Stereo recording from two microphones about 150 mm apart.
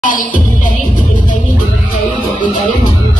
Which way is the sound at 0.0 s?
65° left (ahead or behind).